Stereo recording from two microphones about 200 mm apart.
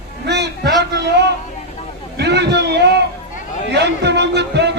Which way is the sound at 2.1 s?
60° right (ahead or behind).